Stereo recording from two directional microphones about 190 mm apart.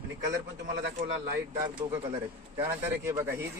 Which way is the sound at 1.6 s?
25° right (ahead or behind).